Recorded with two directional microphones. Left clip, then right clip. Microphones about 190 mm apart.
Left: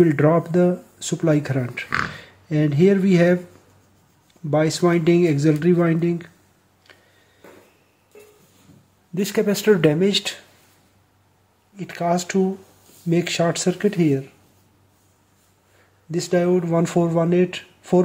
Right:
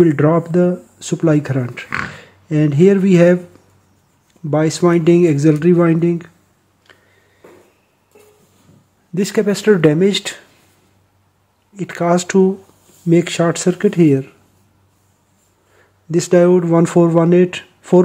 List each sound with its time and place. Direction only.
0.0 s speech: 15° right (ahead or behind)
4.5 s speech: 20° right (ahead or behind)
6.9 s a sound: 20° right (ahead or behind)
9.1 s speech: 25° right (ahead or behind)
11.7 s speech: 35° right (ahead or behind)
13.1 s speech: 25° right (ahead or behind)
16.1 s speech: 30° right (ahead or behind)